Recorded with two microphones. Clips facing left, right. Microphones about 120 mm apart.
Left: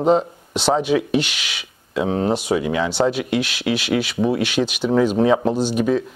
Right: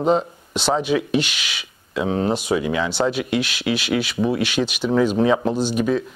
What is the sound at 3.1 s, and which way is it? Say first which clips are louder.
Speech: left 1 dB; 55° left (ahead or behind).